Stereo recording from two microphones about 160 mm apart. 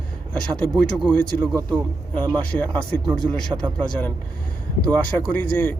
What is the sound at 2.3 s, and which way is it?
Speech, 10° left (ahead or behind).